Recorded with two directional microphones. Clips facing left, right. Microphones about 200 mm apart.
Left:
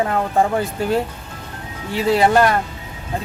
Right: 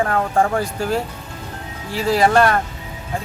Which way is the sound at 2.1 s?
5° left (ahead or behind).